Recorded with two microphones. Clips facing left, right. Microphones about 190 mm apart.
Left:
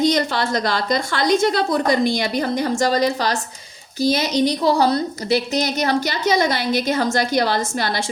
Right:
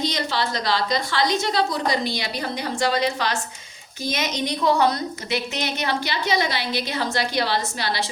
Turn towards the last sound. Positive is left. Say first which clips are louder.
# left 4 dB
turn(degrees=45)  # may be behind; listen again after turning